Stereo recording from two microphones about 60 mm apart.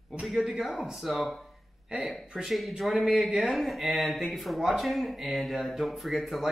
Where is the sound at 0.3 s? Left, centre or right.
Centre.